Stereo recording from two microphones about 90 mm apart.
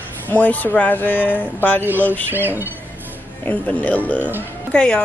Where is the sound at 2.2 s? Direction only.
25° right (ahead or behind).